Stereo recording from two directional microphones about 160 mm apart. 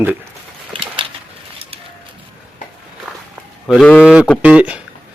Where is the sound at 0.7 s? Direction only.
35° right (ahead or behind).